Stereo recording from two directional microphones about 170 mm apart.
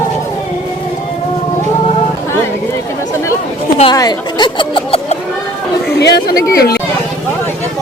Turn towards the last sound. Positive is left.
turn(degrees=70)  # may be behind; listen again after turning